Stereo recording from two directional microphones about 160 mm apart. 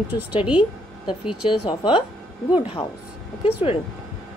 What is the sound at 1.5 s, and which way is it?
Speech, 30° left (ahead or behind).